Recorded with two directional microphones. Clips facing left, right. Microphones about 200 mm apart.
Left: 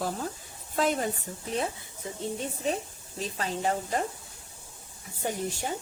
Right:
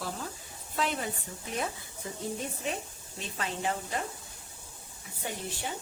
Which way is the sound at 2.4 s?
35° left (ahead or behind).